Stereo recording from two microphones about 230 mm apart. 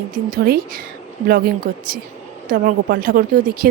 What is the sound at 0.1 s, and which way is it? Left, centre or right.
A woman's voice, right.